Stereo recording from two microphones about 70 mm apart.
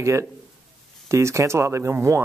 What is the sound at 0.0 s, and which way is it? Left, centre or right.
Speech, right.